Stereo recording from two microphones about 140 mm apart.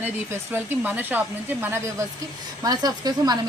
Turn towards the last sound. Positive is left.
turn(degrees=-30)  # may be behind; listen again after turning